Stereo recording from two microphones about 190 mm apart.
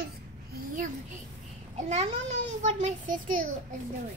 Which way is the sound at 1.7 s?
35° right (ahead or behind).